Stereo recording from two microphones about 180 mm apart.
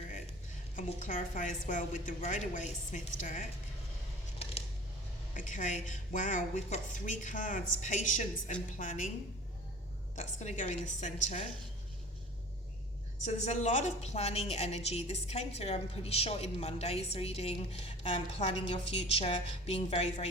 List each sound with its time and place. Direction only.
0.8 s a woman's voice: 45° left (ahead or behind)
5.3 s a woman's voice: 45° left (ahead or behind)
10.2 s a woman's voice: 40° left (ahead or behind)
13.2 s a woman's voice: 40° left (ahead or behind)